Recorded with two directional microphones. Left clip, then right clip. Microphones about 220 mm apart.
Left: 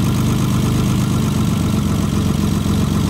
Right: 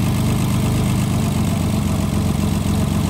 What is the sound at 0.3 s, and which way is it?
Vehicle, 25° left (ahead or behind).